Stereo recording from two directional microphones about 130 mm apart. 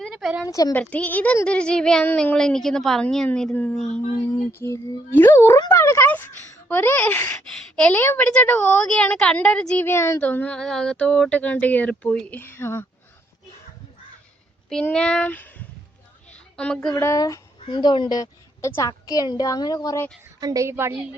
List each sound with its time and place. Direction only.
0.0 s a sound: centre (ahead or behind)
0.4 s a woman's voice: 25° left (ahead or behind)
0.7 s a woman's voice: 10° left (ahead or behind)
14.8 s speech: 5° left (ahead or behind)
16.3 s a sound: 10° left (ahead or behind)
16.9 s a woman's voice: 25° left (ahead or behind)
17.7 s a woman's voice: 35° left (ahead or behind)
20.4 s a woman's voice: 25° right (ahead or behind)